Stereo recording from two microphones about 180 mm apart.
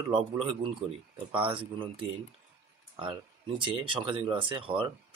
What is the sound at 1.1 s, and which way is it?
Speech, 30° right (ahead or behind).